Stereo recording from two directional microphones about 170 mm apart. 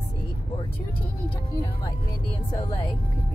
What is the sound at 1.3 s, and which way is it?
Speech, 25° left (ahead or behind).